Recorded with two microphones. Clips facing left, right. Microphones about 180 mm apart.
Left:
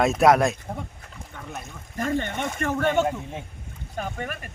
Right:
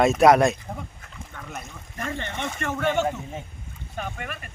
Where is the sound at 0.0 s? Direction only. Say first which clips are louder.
Right 2 dB; centre (ahead or behind).